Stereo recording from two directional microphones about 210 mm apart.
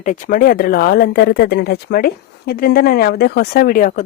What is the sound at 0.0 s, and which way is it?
A woman's voice, 35° left (ahead or behind).